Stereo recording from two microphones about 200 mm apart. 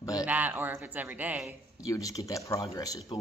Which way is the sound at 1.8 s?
15° left (ahead or behind).